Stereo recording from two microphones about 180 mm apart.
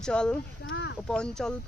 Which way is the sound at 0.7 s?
80° left.